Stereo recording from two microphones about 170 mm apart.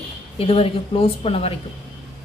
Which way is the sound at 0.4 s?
35° left (ahead or behind).